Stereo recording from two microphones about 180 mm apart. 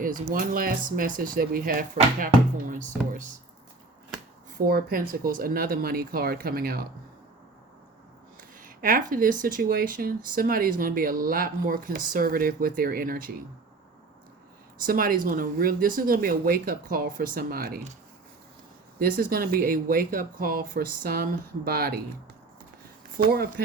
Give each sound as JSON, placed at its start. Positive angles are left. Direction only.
{"t": 0.0, "sound": "speech", "side_deg": -50}
{"t": 4.5, "sound": "speech", "side_deg": -55}
{"t": 8.4, "sound": "speech", "side_deg": -50}
{"t": 14.8, "sound": "speech", "side_deg": -50}
{"t": 18.9, "sound": "speech", "side_deg": -50}
{"t": 23.1, "sound": "speech", "side_deg": -55}